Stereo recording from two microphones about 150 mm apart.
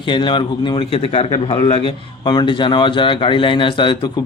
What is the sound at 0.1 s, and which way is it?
A man's voice, 30° left (ahead or behind).